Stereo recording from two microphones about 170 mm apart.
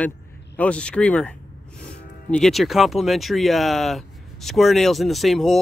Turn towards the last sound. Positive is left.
turn(degrees=0)  # may be behind; listen again after turning